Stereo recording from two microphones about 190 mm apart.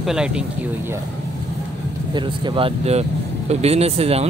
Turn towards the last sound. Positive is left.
turn(degrees=-35)  # may be behind; listen again after turning